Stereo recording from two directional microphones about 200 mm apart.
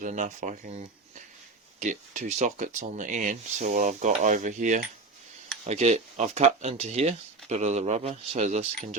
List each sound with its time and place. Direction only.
0.0 s speech: 40° right (ahead or behind)
1.8 s speech: 40° right (ahead or behind)